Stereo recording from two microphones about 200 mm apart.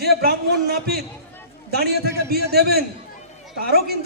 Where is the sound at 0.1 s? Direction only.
50° right (ahead or behind).